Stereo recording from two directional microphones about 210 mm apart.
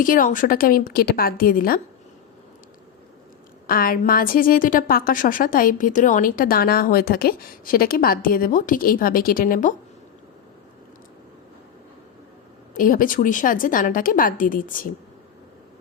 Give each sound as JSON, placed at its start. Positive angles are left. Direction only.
{"t": 0.0, "sound": "a woman's voice", "side_deg": 40}
{"t": 3.7, "sound": "a woman's voice", "side_deg": 45}
{"t": 12.7, "sound": "a woman's voice", "side_deg": 40}